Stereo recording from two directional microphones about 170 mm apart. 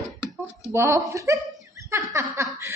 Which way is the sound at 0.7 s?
15° right (ahead or behind).